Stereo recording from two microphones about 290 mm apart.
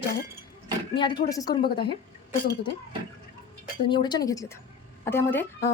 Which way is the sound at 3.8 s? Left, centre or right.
Centre.